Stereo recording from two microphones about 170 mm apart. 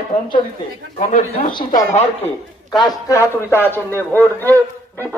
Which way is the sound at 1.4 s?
55° left (ahead or behind).